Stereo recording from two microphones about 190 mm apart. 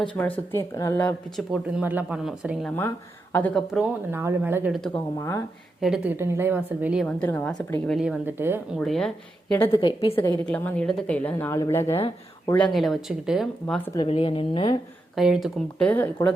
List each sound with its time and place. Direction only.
0.1 s a woman's voice: 10° left (ahead or behind)
1.4 s speech: 5° right (ahead or behind)
3.3 s a woman's voice: 10° left (ahead or behind)
3.7 s a woman's voice: 10° right (ahead or behind)
5.1 s a woman's voice: 15° left (ahead or behind)
5.8 s a woman's voice: 5° right (ahead or behind)
7.0 s a woman's voice: 10° left (ahead or behind)
7.9 s a woman's voice: 5° right (ahead or behind)
8.8 s speech: centre (ahead or behind)
9.7 s a woman's voice: 25° left (ahead or behind)
10.4 s a woman's voice: 5° left (ahead or behind)
14.1 s a woman's voice: 30° left (ahead or behind)
15.1 s speech: centre (ahead or behind)